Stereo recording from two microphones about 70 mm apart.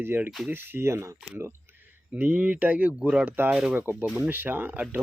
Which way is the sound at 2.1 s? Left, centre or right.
Right.